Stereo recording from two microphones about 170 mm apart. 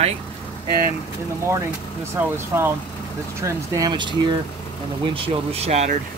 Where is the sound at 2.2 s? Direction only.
15° right (ahead or behind).